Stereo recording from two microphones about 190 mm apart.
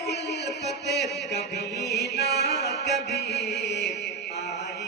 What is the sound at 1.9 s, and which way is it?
Mantra, 60° left (ahead or behind).